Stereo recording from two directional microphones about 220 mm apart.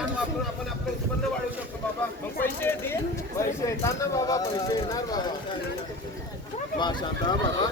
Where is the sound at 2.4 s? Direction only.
10° left (ahead or behind).